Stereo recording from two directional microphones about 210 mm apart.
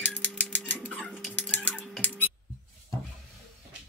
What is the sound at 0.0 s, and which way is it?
Typewriter, 5° left (ahead or behind).